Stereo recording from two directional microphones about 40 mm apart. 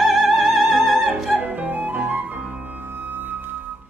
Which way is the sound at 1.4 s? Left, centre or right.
Right.